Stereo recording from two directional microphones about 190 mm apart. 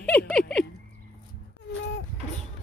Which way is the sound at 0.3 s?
5° left (ahead or behind).